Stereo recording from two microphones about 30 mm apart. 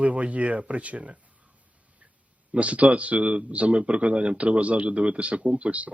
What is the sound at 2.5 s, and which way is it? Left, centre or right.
Speech, right.